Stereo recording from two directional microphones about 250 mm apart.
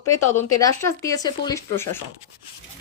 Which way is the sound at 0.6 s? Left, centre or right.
Centre.